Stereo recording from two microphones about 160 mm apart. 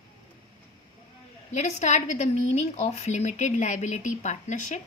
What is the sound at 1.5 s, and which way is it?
Speech, 50° left (ahead or behind).